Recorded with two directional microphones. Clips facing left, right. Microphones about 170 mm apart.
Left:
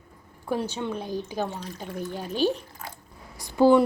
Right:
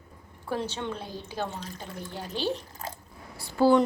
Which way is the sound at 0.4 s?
15° left (ahead or behind).